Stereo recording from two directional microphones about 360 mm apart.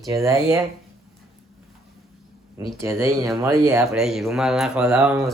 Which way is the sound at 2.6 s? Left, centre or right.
Centre.